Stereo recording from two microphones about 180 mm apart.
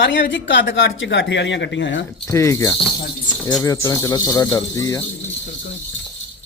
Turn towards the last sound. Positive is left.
turn(degrees=20)  # may be behind; listen again after turning